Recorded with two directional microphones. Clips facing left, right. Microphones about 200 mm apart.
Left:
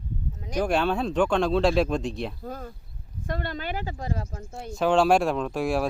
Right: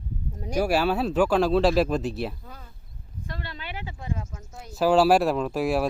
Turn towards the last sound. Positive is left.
turn(degrees=0)  # may be behind; listen again after turning